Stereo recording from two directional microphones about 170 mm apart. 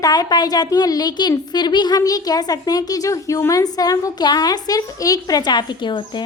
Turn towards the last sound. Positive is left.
turn(degrees=30)  # may be behind; listen again after turning